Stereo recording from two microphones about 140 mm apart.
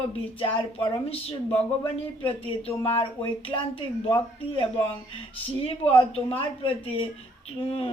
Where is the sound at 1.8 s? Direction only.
40° left (ahead or behind).